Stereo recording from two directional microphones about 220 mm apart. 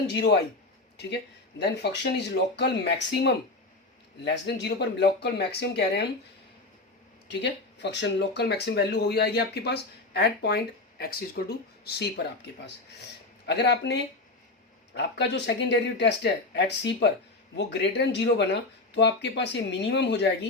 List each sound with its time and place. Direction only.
0.1 s speech: 50° left (ahead or behind)
1.5 s speech: 50° left (ahead or behind)
7.3 s speech: 50° left (ahead or behind)
13.5 s speech: 50° left (ahead or behind)